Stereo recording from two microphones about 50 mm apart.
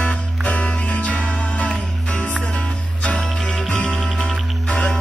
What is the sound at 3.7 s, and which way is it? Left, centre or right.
Music, left.